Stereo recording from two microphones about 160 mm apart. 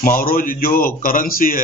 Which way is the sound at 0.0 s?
60° left (ahead or behind).